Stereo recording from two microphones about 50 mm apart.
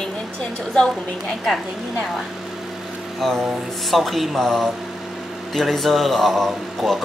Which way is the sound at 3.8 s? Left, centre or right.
Centre.